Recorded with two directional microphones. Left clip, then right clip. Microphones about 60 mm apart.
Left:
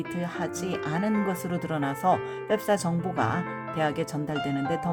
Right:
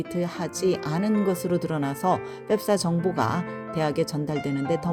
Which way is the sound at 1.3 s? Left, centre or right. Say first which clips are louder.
Right 4 dB; right.